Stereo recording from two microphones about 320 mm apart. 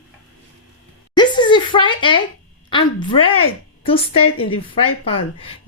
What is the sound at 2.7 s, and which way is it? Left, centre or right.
A woman's voice, centre.